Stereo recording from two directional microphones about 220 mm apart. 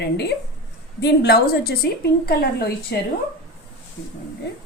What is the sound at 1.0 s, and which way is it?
A woman's voice, 45° left (ahead or behind).